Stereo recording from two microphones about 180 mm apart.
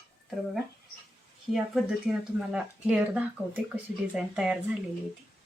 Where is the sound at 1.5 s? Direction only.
5° right (ahead or behind).